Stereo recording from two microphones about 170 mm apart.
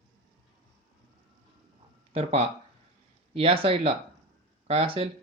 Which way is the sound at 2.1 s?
35° right (ahead or behind).